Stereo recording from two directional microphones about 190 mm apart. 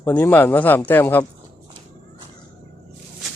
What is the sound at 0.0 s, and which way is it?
Speech, 10° left (ahead or behind).